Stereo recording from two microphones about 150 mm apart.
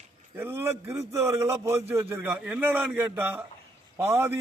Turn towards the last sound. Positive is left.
turn(degrees=-15)  # may be behind; listen again after turning